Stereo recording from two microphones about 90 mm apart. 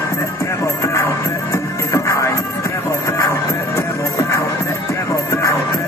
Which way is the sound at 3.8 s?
35° left (ahead or behind).